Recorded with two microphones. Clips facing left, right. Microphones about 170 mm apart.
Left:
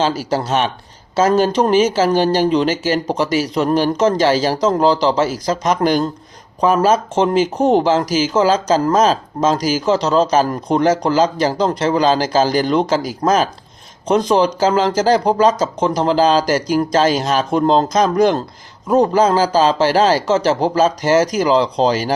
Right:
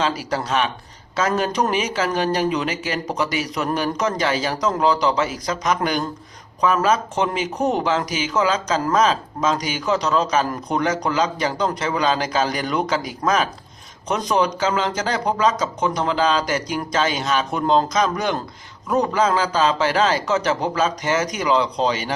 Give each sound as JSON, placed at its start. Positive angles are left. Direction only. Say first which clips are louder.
{"t": 0.0, "sound": "speech", "louder": "left 5 dB", "side_deg": 30}